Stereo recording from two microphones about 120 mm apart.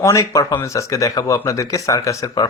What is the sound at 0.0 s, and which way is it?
Speech, 30° left (ahead or behind).